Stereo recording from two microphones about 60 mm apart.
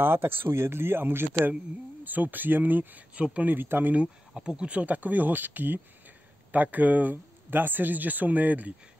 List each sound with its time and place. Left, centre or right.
0.0 s speech: right
4.4 s speech: centre